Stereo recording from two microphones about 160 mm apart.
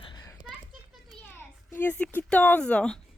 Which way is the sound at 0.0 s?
25° left (ahead or behind).